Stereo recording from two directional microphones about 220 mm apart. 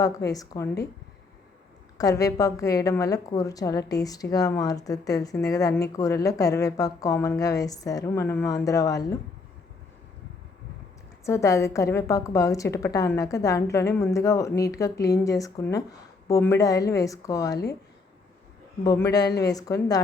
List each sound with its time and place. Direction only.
0.0 s a woman's voice: 15° left (ahead or behind)
2.0 s a woman's voice: 15° left (ahead or behind)
11.3 s a woman's voice: 15° left (ahead or behind)
18.8 s a woman's voice: 15° left (ahead or behind)